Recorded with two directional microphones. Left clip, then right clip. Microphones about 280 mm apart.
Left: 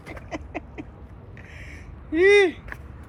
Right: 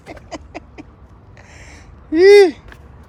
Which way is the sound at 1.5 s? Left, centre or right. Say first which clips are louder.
Right 2 dB; centre.